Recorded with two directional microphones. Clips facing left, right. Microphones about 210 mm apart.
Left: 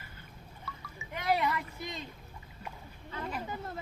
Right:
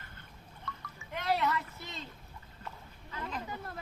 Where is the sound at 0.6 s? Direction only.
5° left (ahead or behind).